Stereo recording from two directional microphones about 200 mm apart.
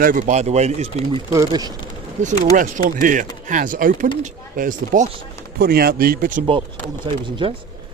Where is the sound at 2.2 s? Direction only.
35° right (ahead or behind).